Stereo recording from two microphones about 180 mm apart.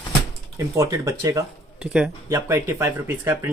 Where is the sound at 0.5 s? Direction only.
15° right (ahead or behind).